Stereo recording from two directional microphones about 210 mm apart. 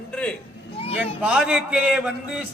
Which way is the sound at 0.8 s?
25° left (ahead or behind).